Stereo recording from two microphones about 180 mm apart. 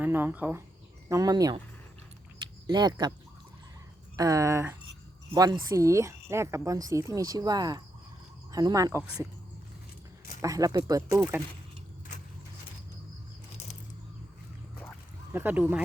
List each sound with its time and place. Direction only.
0.0 s speech: 10° right (ahead or behind)
1.1 s a woman's voice: 20° right (ahead or behind)
2.6 s a woman's voice: 25° right (ahead or behind)
4.2 s a woman's voice: 20° right (ahead or behind)
10.4 s a woman's voice: 20° right (ahead or behind)
15.3 s speech: 10° right (ahead or behind)